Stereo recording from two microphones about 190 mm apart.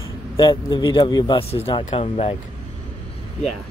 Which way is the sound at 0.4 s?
20° left (ahead or behind).